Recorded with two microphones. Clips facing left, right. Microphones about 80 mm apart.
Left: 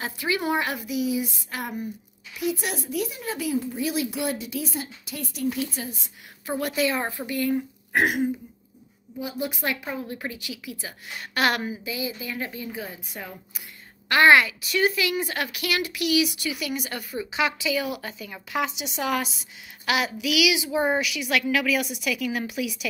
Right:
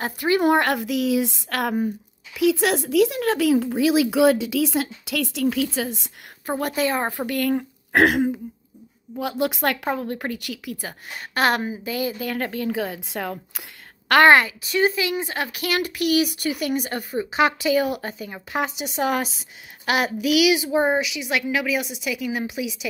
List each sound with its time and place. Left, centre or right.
0.0 s a woman's voice: right
0.6 s speech: right
6.4 s a child's voice: right
7.1 s a woman's voice: right
9.2 s a woman's voice: right
9.8 s a woman's voice: right
11.3 s a child's voice: right
11.9 s a woman's voice: right
14.3 s a child's voice: right
20.9 s a woman's voice: right